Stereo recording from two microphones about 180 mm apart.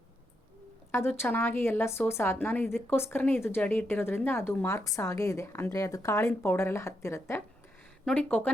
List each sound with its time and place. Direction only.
0.9 s speech: 10° left (ahead or behind)